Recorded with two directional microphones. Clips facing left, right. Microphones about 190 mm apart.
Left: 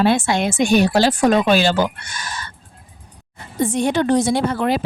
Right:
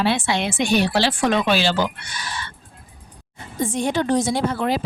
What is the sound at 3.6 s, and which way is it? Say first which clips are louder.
A woman's voice: left 4 dB; 70° left (ahead or behind).